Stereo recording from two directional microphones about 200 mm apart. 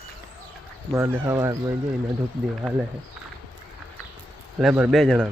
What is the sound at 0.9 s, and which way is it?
Speech, 10° right (ahead or behind).